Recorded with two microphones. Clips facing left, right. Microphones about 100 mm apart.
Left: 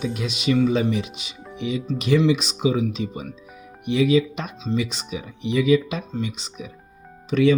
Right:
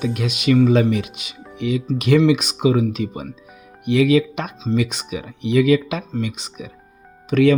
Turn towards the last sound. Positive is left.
turn(degrees=-60)  # may be behind; listen again after turning